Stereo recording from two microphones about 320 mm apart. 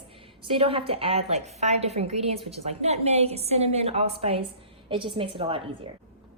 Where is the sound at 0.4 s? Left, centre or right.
Centre.